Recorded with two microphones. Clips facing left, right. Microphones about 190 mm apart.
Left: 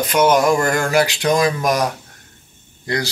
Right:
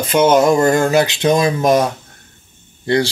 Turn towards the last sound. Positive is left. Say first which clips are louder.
# right 7 dB
turn(degrees=-30)  # may be behind; listen again after turning